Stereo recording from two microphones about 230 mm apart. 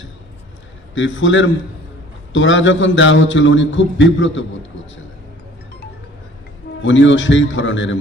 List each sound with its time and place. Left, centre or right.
0.9 s a man's voice: left
6.8 s a man's voice: left